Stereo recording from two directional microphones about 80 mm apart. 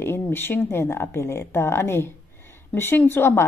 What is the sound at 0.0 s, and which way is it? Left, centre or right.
Speech, left.